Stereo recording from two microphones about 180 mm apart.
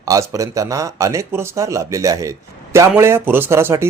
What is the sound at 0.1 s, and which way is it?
Speech, 20° right (ahead or behind).